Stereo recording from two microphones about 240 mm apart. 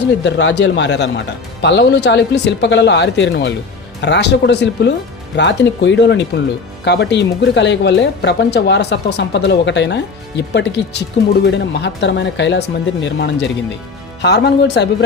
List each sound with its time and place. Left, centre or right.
0.3 s speech: left